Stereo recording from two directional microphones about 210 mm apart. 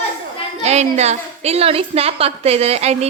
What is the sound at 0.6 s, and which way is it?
A woman's voice, 30° right (ahead or behind).